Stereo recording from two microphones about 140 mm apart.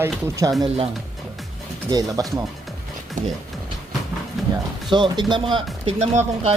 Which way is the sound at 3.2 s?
65° right (ahead or behind).